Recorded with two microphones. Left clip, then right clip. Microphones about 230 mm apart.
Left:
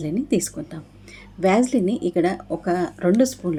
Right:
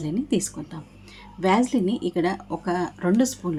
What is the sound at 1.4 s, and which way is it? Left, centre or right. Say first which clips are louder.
Speech: left 3 dB; centre.